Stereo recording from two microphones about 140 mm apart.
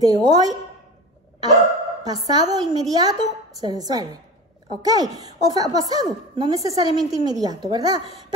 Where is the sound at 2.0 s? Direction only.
30° right (ahead or behind).